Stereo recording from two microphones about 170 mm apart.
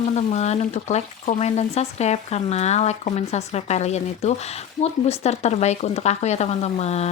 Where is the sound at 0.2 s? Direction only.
40° left (ahead or behind).